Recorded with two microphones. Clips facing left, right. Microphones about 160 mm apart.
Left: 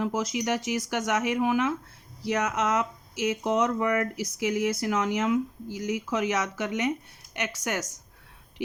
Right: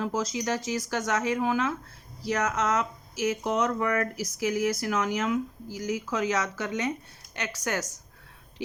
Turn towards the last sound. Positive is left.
turn(degrees=20)  # may be behind; listen again after turning